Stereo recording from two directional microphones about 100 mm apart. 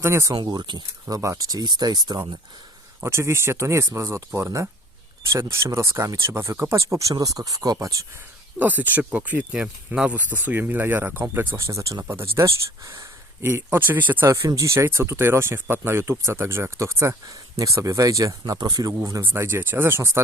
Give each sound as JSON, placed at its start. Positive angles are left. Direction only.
{"t": 0.0, "sound": "speech", "side_deg": -25}
{"t": 0.4, "sound": "speech", "side_deg": -45}
{"t": 3.0, "sound": "speech", "side_deg": -30}
{"t": 8.5, "sound": "speech", "side_deg": -15}
{"t": 14.4, "sound": "speech", "side_deg": -35}
{"t": 18.5, "sound": "speech", "side_deg": -45}